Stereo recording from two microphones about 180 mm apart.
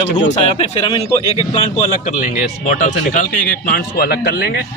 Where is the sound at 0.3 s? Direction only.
35° left (ahead or behind).